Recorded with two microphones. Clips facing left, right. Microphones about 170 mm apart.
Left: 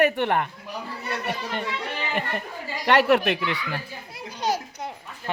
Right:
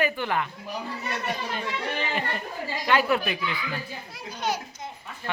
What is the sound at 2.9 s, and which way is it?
Speech, 75° left (ahead or behind).